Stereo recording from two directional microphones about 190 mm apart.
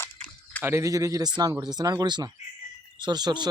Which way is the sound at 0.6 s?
15° right (ahead or behind).